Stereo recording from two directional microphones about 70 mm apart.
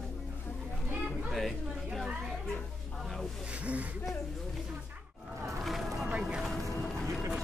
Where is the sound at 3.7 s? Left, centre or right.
Right.